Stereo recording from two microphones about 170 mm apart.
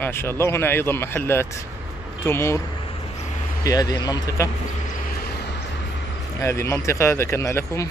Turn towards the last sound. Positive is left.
turn(degrees=15)  # may be behind; listen again after turning